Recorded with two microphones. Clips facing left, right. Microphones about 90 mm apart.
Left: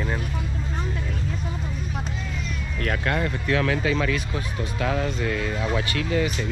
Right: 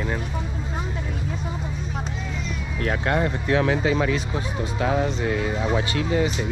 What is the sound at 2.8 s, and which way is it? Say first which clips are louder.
Speech: right 2 dB; 25° right (ahead or behind).